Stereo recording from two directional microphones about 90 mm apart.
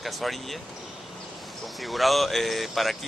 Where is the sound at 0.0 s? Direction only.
Centre (ahead or behind).